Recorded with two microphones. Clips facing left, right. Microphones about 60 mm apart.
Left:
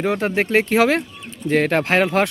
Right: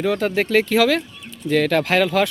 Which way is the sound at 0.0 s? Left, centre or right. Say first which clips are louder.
Even; left.